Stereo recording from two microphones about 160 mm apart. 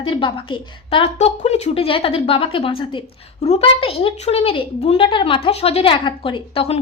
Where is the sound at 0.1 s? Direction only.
30° left (ahead or behind).